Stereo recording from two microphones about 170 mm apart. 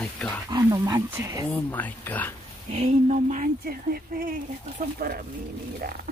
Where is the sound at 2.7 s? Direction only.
40° right (ahead or behind); by 5.3 s 60° right (ahead or behind).